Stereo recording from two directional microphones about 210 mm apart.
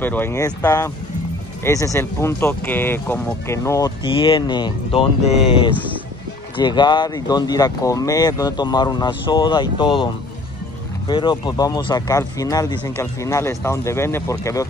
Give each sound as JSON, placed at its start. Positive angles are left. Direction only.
{"t": 0.0, "sound": "speech", "side_deg": 10}
{"t": 6.5, "sound": "speech", "side_deg": 20}